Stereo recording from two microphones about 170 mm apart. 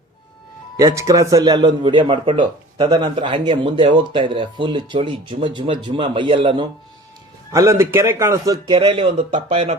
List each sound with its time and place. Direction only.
0.8 s a man's voice: 20° right (ahead or behind)
7.5 s a man's voice: 15° right (ahead or behind); by 9.7 s 35° right (ahead or behind)